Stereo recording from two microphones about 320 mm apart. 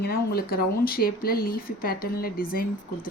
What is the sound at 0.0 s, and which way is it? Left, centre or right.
Speech, left.